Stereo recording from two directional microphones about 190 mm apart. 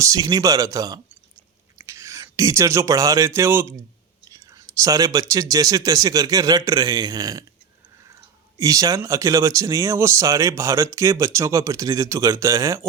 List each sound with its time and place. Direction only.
0.0 s a man's voice: 20° right (ahead or behind)
4.3 s a sound: 20° right (ahead or behind)
5.3 s a man's voice: 15° right (ahead or behind)